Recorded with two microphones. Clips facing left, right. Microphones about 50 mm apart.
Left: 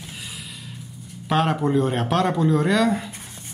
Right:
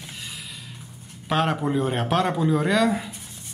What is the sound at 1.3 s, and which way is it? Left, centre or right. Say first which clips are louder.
Speech: left 2 dB; centre.